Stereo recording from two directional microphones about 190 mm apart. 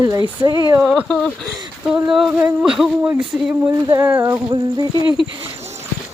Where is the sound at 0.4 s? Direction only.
20° right (ahead or behind).